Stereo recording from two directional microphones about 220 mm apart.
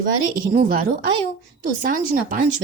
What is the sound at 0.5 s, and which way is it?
A woman's voice, 40° right (ahead or behind).